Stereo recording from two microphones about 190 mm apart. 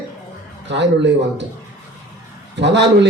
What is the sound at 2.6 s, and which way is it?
Speech, 65° right (ahead or behind).